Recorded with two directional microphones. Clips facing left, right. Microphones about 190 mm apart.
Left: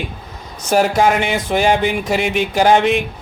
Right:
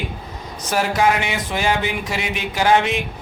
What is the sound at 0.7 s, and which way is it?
Speech, 50° left (ahead or behind).